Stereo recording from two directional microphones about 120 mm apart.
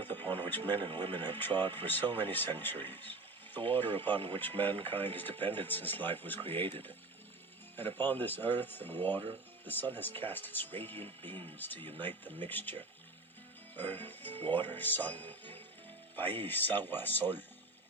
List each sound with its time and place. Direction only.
0.0 s a sound: 15° left (ahead or behind)
0.5 s speech: 15° left (ahead or behind)
0.8 s speech: 45° right (ahead or behind)
1.1 s speech: 15° left (ahead or behind)
7.8 s speech: 15° left (ahead or behind)
13.7 s speech: 15° left (ahead or behind)